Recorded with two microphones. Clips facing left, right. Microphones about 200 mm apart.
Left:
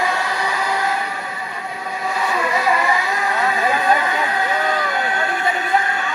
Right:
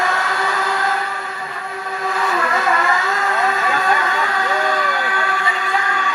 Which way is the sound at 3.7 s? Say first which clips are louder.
Left 1 dB; 20° left (ahead or behind).